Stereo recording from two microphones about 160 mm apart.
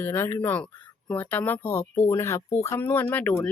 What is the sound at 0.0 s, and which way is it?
Speech, 15° left (ahead or behind).